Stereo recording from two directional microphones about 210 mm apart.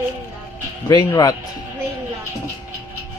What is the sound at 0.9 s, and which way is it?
Speech, 15° left (ahead or behind).